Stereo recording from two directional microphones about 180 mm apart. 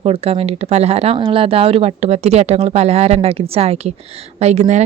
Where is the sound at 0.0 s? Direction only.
35° right (ahead or behind).